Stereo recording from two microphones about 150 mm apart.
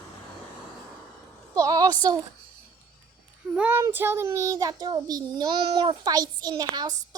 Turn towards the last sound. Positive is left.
turn(degrees=-25)  # may be behind; listen again after turning